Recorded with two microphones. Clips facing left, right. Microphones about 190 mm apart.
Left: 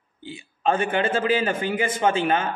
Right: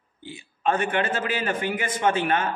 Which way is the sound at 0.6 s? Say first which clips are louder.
Left 2 dB; 30° left (ahead or behind).